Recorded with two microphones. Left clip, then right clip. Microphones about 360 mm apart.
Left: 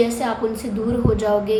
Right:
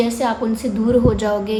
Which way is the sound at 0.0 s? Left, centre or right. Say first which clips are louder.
Right 1 dB; right.